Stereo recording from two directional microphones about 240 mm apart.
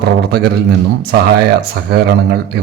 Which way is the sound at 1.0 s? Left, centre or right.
Right.